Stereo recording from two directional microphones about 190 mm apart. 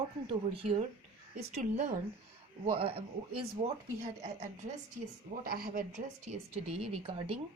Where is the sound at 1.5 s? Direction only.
40° right (ahead or behind).